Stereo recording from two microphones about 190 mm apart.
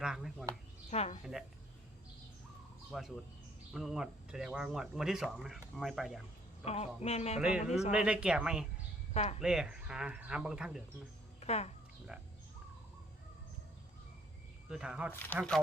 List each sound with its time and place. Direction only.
0.0 s speech: 5° right (ahead or behind)
0.9 s speech: 35° left (ahead or behind)
1.2 s speech: centre (ahead or behind)
2.9 s speech: centre (ahead or behind)
6.7 s speech: 35° left (ahead or behind)
7.9 s speech: 5° right (ahead or behind)
9.1 s speech: 35° left (ahead or behind)
9.4 s speech: 5° right (ahead or behind)
11.3 s music: 35° left (ahead or behind)
14.7 s speech: 5° right (ahead or behind)
15.1 s speech: 10° left (ahead or behind)